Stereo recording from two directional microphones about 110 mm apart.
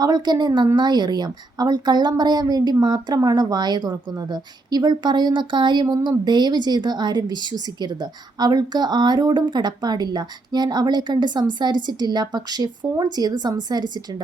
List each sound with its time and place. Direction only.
0.0 s speech: 40° right (ahead or behind)